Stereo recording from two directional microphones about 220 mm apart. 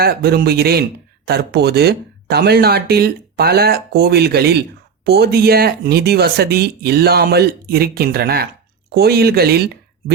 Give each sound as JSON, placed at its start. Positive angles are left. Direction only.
{"t": 0.0, "sound": "speech", "side_deg": -45}